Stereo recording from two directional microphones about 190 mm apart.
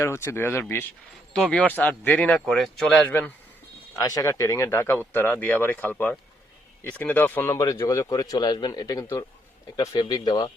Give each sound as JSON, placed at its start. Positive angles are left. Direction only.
{"t": 0.0, "sound": "speech", "side_deg": 15}